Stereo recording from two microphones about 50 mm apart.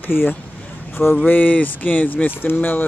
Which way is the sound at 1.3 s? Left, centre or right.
Left.